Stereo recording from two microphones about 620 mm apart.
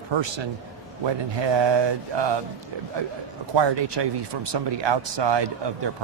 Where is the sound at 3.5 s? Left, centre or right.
Right.